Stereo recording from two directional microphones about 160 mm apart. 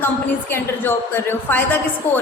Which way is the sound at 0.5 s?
15° left (ahead or behind).